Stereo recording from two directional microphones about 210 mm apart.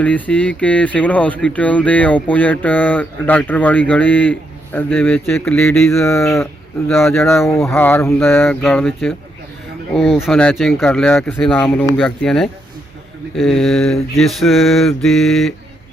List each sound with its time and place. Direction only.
0.0 s speech: 5° left (ahead or behind)